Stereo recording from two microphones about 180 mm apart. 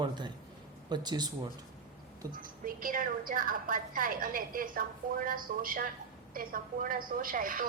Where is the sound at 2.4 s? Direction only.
50° right (ahead or behind).